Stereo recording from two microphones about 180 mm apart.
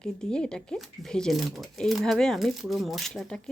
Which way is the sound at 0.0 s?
5° left (ahead or behind).